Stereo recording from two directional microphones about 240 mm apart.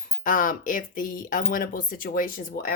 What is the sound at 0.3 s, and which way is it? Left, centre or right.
Speech, left.